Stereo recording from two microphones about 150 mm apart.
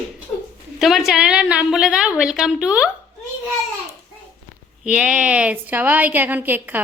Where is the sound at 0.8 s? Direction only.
Centre (ahead or behind).